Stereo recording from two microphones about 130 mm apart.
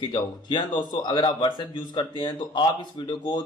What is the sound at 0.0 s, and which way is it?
Speech, 35° left (ahead or behind).